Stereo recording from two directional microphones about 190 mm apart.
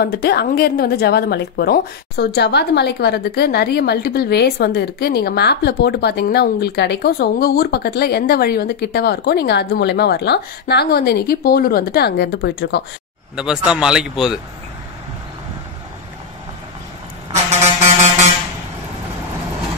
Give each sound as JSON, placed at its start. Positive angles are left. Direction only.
{"t": 0.0, "sound": "a woman's voice", "side_deg": 60}
{"t": 13.4, "sound": "speech", "side_deg": -5}
{"t": 17.3, "sound": "vehicle", "side_deg": -35}